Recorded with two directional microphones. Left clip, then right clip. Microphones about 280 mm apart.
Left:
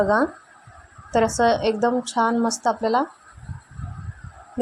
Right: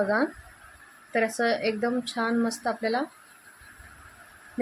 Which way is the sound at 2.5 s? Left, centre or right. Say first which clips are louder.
Left 7 dB; centre.